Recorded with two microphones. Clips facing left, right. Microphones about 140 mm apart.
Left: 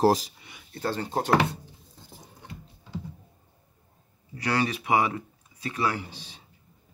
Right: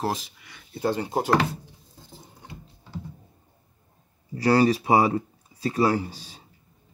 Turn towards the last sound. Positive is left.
turn(degrees=-40)  # may be behind; listen again after turning